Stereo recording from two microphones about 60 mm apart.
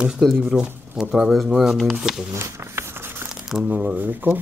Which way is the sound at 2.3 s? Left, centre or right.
Right.